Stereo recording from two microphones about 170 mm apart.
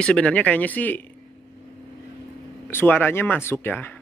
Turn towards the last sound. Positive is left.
turn(degrees=10)  # may be behind; listen again after turning